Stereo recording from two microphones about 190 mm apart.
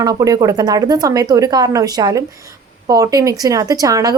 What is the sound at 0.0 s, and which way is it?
Speech, 20° right (ahead or behind).